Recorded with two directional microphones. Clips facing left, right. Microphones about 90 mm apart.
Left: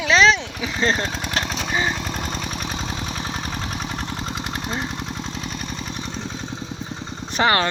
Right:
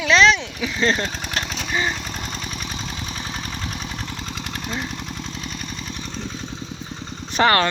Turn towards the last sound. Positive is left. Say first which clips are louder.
# right 2 dB
turn(degrees=15)  # may be behind; listen again after turning